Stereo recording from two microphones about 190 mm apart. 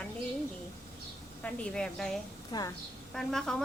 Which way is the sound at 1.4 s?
5° left (ahead or behind).